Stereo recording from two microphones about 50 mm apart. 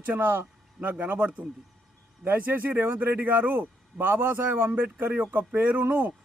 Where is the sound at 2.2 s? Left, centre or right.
Right.